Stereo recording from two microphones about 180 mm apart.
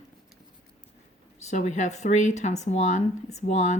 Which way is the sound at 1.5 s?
40° left (ahead or behind).